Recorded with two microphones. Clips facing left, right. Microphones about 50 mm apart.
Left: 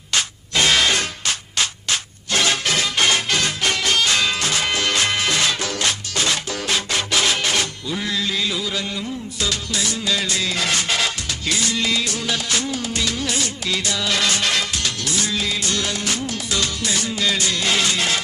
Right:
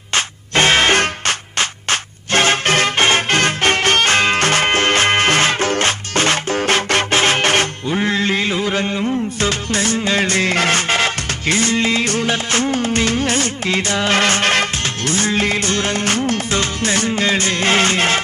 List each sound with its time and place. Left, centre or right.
0.1 s music: right